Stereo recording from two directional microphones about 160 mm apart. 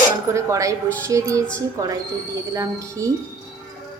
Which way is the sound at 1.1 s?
20° right (ahead or behind).